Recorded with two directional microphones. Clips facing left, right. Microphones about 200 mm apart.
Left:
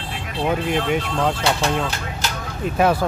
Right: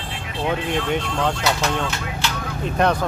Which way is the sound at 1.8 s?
35° left (ahead or behind).